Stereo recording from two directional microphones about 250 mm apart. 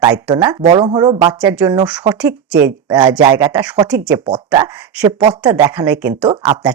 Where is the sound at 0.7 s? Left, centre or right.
Centre.